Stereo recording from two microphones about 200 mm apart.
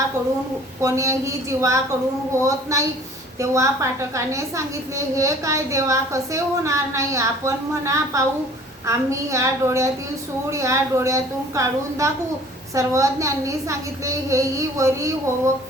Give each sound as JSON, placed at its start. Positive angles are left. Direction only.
{"t": 0.8, "sound": "a woman's voice", "side_deg": -15}